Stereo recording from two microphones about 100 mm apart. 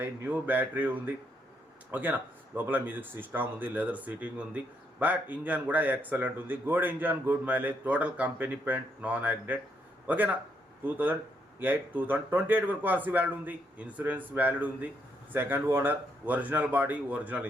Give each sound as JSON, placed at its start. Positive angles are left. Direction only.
{"t": 0.0, "sound": "speech", "side_deg": -20}